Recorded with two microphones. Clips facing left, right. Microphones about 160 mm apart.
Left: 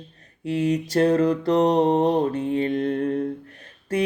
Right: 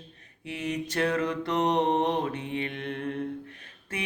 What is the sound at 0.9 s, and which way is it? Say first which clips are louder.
Mantra: left 8 dB; 35° left (ahead or behind).